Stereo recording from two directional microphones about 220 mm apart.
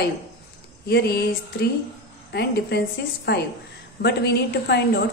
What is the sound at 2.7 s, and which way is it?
A woman's voice, 50° left (ahead or behind).